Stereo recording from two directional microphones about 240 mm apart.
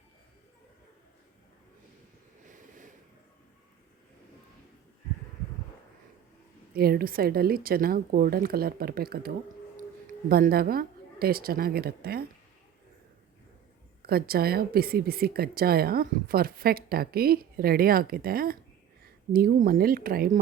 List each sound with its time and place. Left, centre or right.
2.5 s a sound: right
6.7 s a woman's voice: right
14.0 s a woman's voice: right